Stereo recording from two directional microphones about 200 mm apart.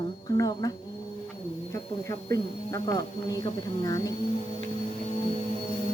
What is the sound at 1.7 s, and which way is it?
A woman's voice, 15° left (ahead or behind).